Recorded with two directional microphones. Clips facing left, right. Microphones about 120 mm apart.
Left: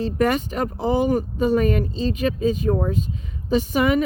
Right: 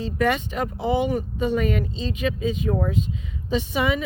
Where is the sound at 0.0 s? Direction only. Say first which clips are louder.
Left 2 dB; 40° left (ahead or behind).